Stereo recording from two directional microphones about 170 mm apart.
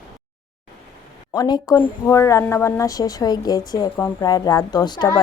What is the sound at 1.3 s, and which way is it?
Speech, 25° left (ahead or behind).